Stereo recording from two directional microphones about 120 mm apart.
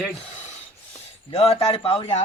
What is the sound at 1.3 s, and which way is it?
Speech, 55° left (ahead or behind).